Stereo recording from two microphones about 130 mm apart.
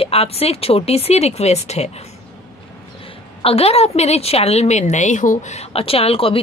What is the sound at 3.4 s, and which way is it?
Speech, 50° left (ahead or behind).